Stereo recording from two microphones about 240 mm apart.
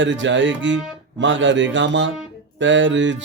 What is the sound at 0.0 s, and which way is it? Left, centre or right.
Mantra, right.